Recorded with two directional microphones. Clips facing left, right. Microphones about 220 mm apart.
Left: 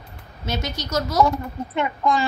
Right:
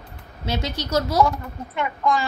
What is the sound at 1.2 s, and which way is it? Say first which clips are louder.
A child's voice: left 1 dB; 25° left (ahead or behind).